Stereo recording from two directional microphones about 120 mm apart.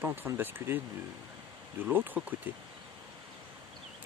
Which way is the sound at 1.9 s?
15° right (ahead or behind).